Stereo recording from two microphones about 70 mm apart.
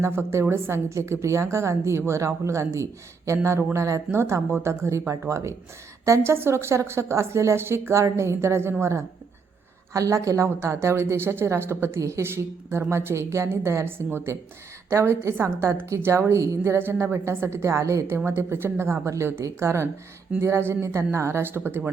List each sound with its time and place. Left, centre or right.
0.0 s a woman's voice: right
9.9 s a woman's voice: right
16.7 s a woman's voice: right
19.0 s a woman's voice: right